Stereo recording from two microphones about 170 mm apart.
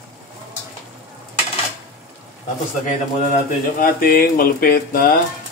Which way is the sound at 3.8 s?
60° left (ahead or behind).